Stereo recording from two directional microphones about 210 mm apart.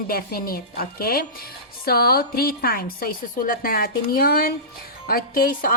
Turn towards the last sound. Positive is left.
turn(degrees=40)  # may be behind; listen again after turning